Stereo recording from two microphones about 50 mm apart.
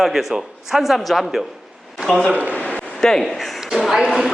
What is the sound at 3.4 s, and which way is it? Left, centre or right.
Speech, centre.